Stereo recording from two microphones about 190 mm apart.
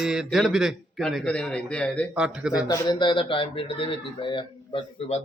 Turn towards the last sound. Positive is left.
turn(degrees=25)  # may be behind; listen again after turning